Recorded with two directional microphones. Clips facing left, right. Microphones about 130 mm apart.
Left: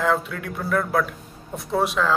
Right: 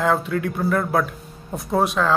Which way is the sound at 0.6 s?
20° right (ahead or behind).